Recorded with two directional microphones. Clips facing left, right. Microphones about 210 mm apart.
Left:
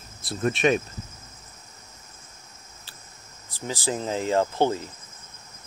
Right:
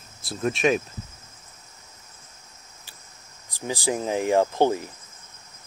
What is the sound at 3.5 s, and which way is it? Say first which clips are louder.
Speech: right 2 dB; 15° right (ahead or behind).